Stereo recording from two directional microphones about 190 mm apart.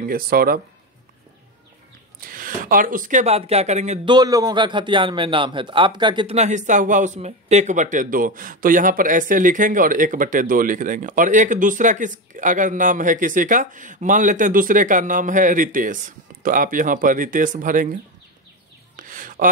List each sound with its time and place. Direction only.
0.0 s a man's voice: 50° right (ahead or behind)
2.1 s speech: 50° right (ahead or behind)
4.1 s a man's voice: 20° right (ahead or behind); by 17.8 s 45° right (ahead or behind)
18.9 s a sound: 45° right (ahead or behind)